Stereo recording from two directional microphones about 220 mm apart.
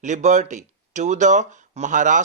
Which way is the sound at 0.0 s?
35° right (ahead or behind).